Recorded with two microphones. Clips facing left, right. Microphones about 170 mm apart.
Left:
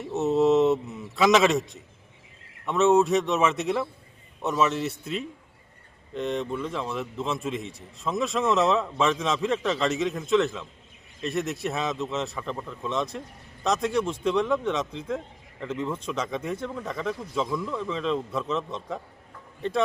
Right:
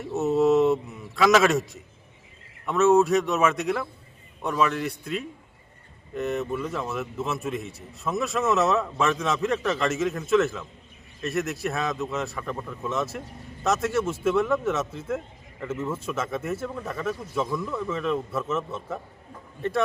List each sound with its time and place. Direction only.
0.0 s speech: centre (ahead or behind)
2.9 s speech: centre (ahead or behind)
3.5 s a man's voice: 25° left (ahead or behind)
6.1 s speech: 5° right (ahead or behind)